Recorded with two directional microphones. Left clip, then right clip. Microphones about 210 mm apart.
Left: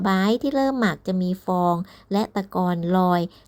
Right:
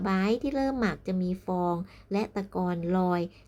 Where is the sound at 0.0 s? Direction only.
25° left (ahead or behind).